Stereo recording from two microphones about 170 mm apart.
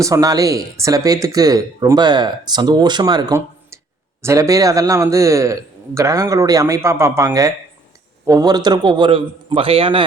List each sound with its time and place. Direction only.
0.0 s speech: 20° right (ahead or behind)